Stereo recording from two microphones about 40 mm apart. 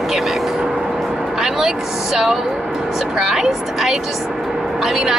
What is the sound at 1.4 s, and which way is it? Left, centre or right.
Speech, centre.